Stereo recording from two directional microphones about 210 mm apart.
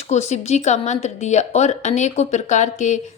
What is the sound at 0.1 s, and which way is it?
Speech, 30° left (ahead or behind).